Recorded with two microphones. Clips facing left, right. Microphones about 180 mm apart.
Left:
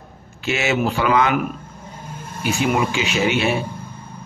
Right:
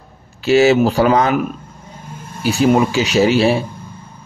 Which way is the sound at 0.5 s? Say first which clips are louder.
Right 9 dB; 35° right (ahead or behind).